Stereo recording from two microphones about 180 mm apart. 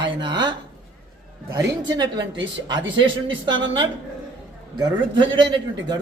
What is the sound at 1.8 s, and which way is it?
A man's voice, 25° right (ahead or behind).